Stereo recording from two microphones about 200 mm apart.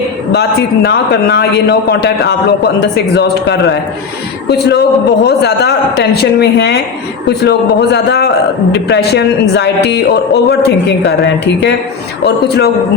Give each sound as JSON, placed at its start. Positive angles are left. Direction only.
{"t": 0.3, "sound": "speech", "side_deg": 55}